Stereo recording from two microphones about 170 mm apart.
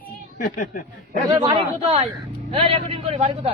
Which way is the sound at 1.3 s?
25° right (ahead or behind).